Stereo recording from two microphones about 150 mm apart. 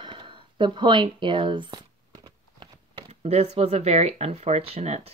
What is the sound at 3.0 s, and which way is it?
Speech, 45° right (ahead or behind).